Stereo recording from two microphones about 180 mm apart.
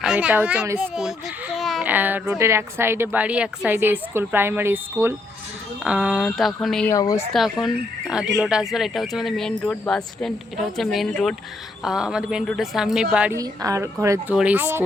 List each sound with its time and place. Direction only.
0.0 s a child's voice: 5° right (ahead or behind)
6.8 s speech: 20° left (ahead or behind)
7.3 s speech: centre (ahead or behind)
13.3 s a child's voice: 20° right (ahead or behind)